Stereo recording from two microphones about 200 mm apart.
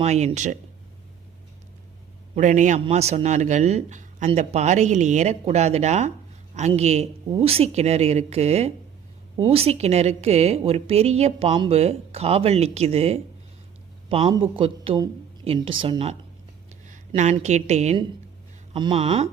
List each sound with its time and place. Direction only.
0.0 s a woman's voice: 35° right (ahead or behind)
2.3 s a woman's voice: 40° right (ahead or behind)
17.2 s a woman's voice: 35° right (ahead or behind)